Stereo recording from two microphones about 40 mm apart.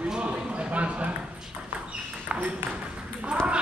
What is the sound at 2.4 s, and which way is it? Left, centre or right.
Ping, right.